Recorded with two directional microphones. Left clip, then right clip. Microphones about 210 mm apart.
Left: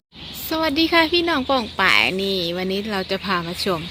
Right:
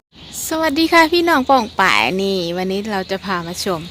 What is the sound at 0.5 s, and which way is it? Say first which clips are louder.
A woman's voice: right 4 dB; 20° right (ahead or behind).